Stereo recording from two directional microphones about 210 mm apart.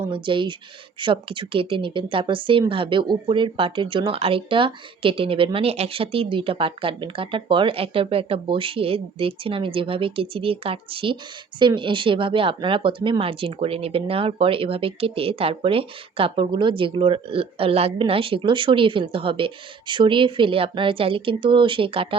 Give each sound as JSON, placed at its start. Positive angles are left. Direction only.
{"t": 0.1, "sound": "speech", "side_deg": -25}